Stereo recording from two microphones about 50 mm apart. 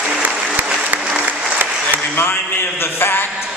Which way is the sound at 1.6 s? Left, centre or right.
Right.